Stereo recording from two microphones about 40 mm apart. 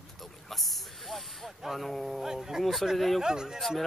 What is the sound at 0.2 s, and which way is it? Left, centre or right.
Snake, centre.